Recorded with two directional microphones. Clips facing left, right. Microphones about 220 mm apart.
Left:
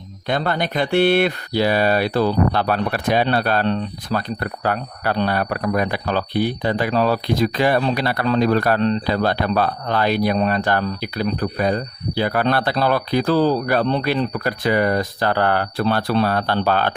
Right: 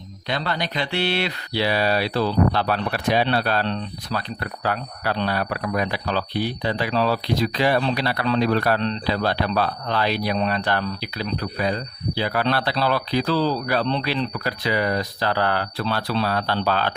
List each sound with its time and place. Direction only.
0.3 s speech: 50° left (ahead or behind)